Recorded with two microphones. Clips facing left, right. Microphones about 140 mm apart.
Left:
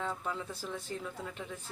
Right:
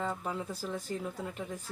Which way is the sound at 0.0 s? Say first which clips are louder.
Right 2 dB; 5° right (ahead or behind).